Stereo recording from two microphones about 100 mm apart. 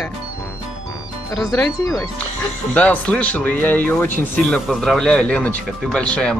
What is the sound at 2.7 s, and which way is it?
Speech, 10° left (ahead or behind).